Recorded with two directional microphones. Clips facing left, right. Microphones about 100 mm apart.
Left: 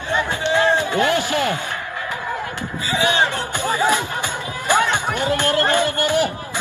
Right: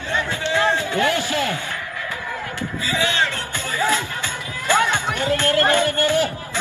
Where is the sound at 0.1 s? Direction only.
20° left (ahead or behind).